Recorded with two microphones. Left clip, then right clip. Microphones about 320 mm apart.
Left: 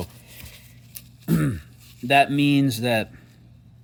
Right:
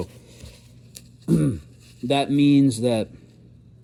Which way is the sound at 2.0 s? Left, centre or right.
Left.